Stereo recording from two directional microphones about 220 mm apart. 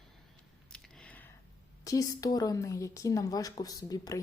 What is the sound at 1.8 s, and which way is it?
A woman's voice, 15° left (ahead or behind).